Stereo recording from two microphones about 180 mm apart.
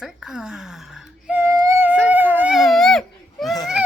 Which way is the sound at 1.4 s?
20° right (ahead or behind).